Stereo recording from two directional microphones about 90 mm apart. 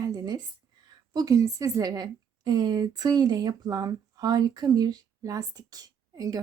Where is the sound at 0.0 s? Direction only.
40° right (ahead or behind).